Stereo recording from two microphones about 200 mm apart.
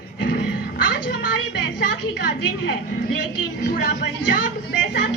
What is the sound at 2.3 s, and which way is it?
A woman's voice, 55° left (ahead or behind).